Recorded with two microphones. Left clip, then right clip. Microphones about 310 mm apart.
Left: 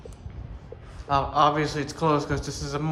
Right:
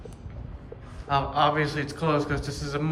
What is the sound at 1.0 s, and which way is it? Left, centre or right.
Speech, centre.